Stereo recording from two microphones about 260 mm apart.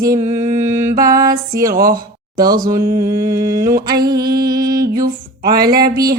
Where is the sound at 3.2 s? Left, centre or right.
Centre.